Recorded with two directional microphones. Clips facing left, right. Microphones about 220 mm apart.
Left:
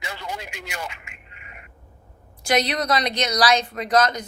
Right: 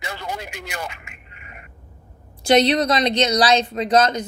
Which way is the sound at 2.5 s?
25° right (ahead or behind).